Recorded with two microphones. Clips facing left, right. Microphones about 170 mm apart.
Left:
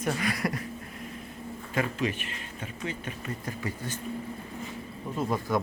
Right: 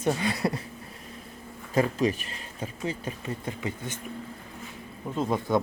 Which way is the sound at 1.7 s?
40° right (ahead or behind).